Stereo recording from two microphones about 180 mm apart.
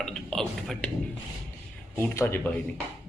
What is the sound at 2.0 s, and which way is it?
Speech, 10° left (ahead or behind).